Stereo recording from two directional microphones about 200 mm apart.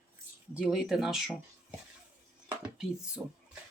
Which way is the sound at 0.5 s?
5° right (ahead or behind).